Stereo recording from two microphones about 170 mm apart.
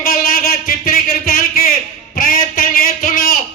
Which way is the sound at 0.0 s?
60° left (ahead or behind).